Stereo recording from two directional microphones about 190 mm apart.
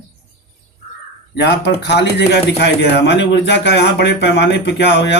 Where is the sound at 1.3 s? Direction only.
60° left (ahead or behind).